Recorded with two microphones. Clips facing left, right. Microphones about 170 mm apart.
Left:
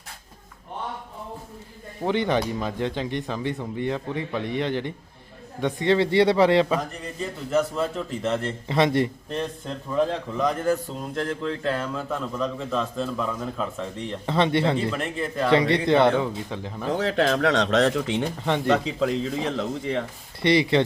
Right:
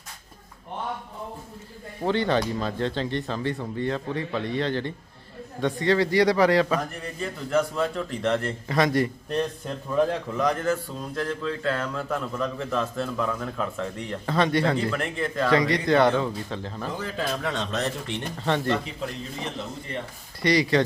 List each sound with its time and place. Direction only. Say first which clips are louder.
2.0 s speech: even; 15° left (ahead or behind)
7.2 s a man's voice: left 1 dB; centre (ahead or behind)
8.6 s speech: left 2 dB; 25° left (ahead or behind)
10.7 s speech: left 2 dB; 25° left (ahead or behind)
11.9 s a man's voice: even; centre (ahead or behind)
14.3 s speech: left 1 dB; 25° left (ahead or behind)
16.9 s speech: left 9 dB; 80° left
18.4 s speech: right 2 dB; 15° left (ahead or behind)
18.9 s speech: left 9 dB; 90° left
20.4 s speech: left 2 dB; 25° left (ahead or behind)